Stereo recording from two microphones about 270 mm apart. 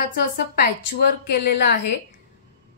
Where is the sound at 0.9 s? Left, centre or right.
Left.